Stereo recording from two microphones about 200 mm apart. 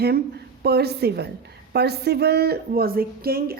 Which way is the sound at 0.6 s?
55° right (ahead or behind).